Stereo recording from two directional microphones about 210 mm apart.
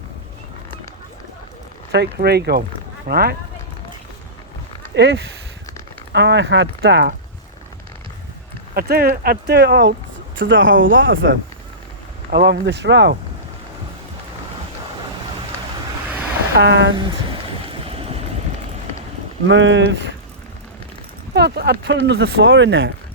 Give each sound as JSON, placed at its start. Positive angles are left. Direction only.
{"t": 1.9, "sound": "speech", "side_deg": -50}
{"t": 4.9, "sound": "speech", "side_deg": -55}
{"t": 8.7, "sound": "speech", "side_deg": -45}
{"t": 10.3, "sound": "speech", "side_deg": -65}
{"t": 12.3, "sound": "speech", "side_deg": -55}
{"t": 16.6, "sound": "speech", "side_deg": -55}
{"t": 17.8, "sound": "vehicle", "side_deg": -30}
{"t": 19.5, "sound": "speech", "side_deg": -60}
{"t": 21.3, "sound": "speech", "side_deg": -50}